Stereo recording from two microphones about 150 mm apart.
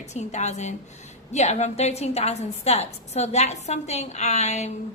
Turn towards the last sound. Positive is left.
turn(degrees=50)  # may be behind; listen again after turning